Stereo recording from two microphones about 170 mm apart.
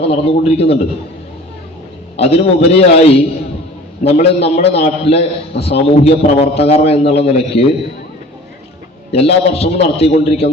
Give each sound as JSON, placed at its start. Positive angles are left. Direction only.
{"t": 0.0, "sound": "a man's voice", "side_deg": 35}
{"t": 2.1, "sound": "a man's voice", "side_deg": 35}
{"t": 9.1, "sound": "a man's voice", "side_deg": 35}